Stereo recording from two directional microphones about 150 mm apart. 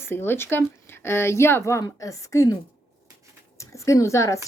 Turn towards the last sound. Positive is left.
turn(degrees=20)  # may be behind; listen again after turning